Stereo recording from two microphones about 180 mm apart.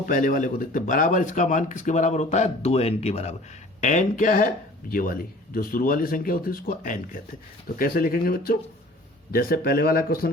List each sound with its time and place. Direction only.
0.0 s speech: 50° left (ahead or behind)